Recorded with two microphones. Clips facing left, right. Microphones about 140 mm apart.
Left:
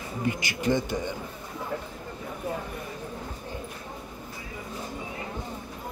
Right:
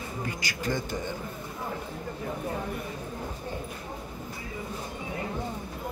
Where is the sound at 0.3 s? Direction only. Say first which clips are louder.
Left 6 dB; 20° left (ahead or behind).